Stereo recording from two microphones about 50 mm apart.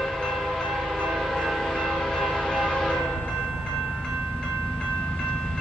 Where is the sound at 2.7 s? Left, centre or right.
Centre.